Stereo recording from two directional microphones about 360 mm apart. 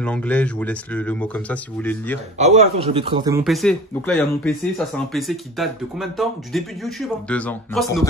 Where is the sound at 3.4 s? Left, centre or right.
Centre.